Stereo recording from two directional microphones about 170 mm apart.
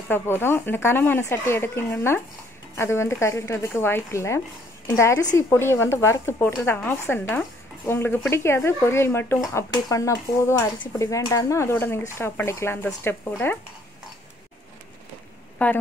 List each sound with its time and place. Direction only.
0.1 s speech: 15° left (ahead or behind)
15.6 s speech: 10° left (ahead or behind)